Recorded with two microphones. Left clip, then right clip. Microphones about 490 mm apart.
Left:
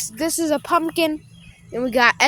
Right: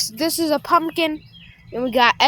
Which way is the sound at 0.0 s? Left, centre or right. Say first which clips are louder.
Right 2 dB; left.